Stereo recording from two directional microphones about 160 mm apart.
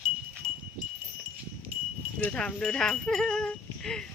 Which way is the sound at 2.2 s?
5° left (ahead or behind).